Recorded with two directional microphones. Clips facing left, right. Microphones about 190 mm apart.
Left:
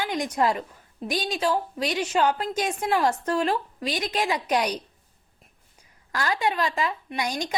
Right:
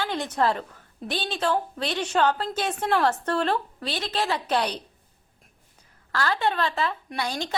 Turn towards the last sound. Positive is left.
turn(degrees=15)  # may be behind; listen again after turning